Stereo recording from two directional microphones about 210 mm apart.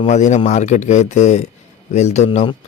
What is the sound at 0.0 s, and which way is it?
Speech, 35° left (ahead or behind).